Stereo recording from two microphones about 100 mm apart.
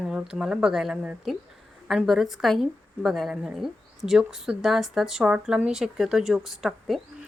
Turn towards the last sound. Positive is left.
turn(degrees=-5)  # may be behind; listen again after turning